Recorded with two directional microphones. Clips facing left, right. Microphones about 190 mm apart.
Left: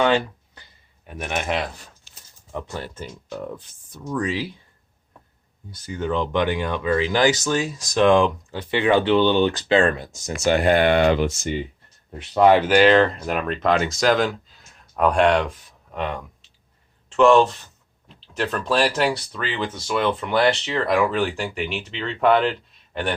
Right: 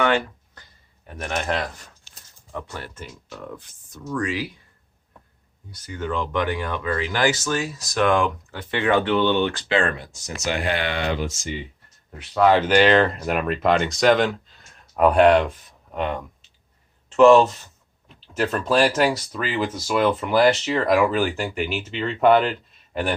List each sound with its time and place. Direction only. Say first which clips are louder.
1.0 s speech: even; 5° left (ahead or behind)
4.2 s speech: left 1 dB; 30° left (ahead or behind)
5.7 s speech: left 3 dB; 25° left (ahead or behind); by 11.5 s 60° left (ahead or behind)
12.3 s speech: left 2 dB; 20° left (ahead or behind)
12.6 s speech: left 1 dB; 5° left (ahead or behind)